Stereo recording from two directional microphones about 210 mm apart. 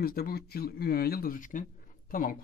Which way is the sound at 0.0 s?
45° left (ahead or behind).